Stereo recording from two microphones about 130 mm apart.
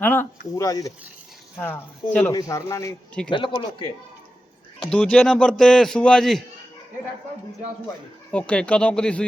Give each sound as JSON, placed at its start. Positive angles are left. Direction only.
{"t": 0.0, "sound": "speech", "side_deg": 15}
{"t": 0.6, "sound": "speech", "side_deg": 25}
{"t": 1.5, "sound": "speech", "side_deg": 15}
{"t": 2.3, "sound": "speech", "side_deg": 25}
{"t": 3.2, "sound": "speech", "side_deg": 40}
{"t": 4.8, "sound": "a man's voice", "side_deg": 5}
{"t": 8.3, "sound": "speech", "side_deg": 10}